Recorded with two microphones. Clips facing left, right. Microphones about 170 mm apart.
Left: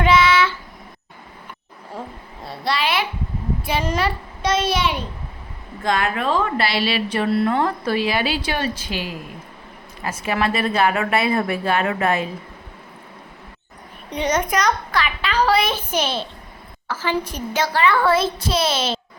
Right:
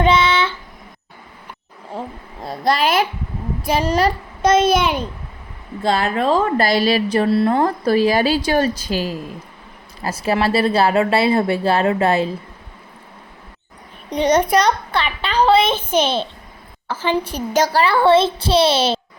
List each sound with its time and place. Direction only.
0.0 s child singing: 30° right (ahead or behind)
2.4 s a sound: 45° right (ahead or behind)
3.6 s a child's voice: 40° right (ahead or behind)
5.8 s a woman's voice: 30° right (ahead or behind)
14.1 s a woman's voice: 35° right (ahead or behind)
16.9 s a woman's voice: 30° right (ahead or behind)